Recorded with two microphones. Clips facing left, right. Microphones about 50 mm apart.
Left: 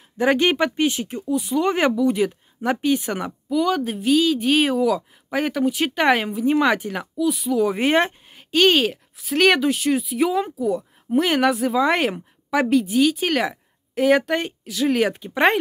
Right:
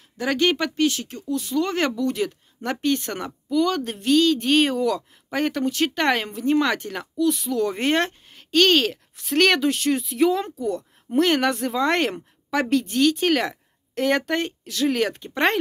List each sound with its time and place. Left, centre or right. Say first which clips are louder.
0.2 s speech: left 3 dB; left